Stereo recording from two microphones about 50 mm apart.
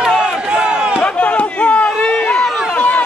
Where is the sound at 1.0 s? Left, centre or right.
Left.